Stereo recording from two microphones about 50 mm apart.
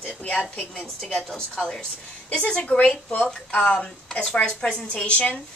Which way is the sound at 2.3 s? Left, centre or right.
Left.